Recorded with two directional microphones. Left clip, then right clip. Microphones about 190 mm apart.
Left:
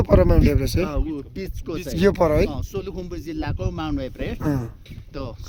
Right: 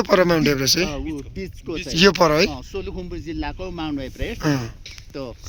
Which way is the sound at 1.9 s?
5° left (ahead or behind).